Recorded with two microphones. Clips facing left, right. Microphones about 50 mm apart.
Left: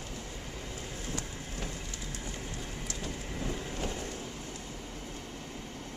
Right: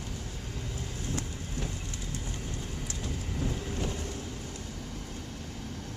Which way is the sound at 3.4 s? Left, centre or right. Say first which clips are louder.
Right 2 dB; centre.